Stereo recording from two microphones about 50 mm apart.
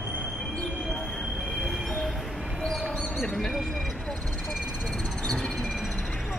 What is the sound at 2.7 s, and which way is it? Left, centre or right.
Bird, centre.